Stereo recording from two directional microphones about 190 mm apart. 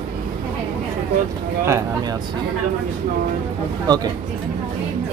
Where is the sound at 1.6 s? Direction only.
15° right (ahead or behind).